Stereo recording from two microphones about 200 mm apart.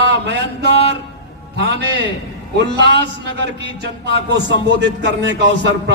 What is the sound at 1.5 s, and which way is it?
A man's voice, 55° right (ahead or behind).